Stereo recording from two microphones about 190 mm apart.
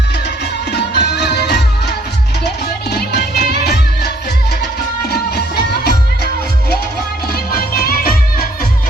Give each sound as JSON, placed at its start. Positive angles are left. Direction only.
{"t": 0.7, "sound": "music", "side_deg": 60}
{"t": 2.9, "sound": "music of bollywood", "side_deg": 55}
{"t": 7.5, "sound": "music", "side_deg": 50}